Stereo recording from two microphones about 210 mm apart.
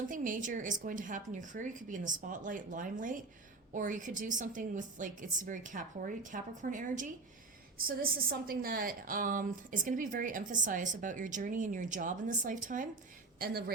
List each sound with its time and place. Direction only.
0.1 s a woman's voice: 40° right (ahead or behind)